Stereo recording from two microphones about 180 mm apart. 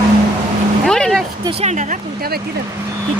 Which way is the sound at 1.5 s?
40° right (ahead or behind).